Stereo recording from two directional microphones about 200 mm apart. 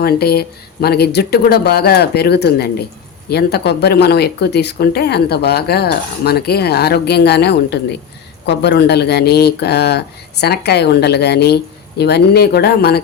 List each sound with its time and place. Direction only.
0.0 s speech: 50° left (ahead or behind)